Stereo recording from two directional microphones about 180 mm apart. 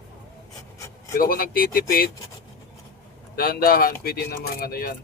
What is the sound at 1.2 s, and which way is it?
Speech, 55° left (ahead or behind).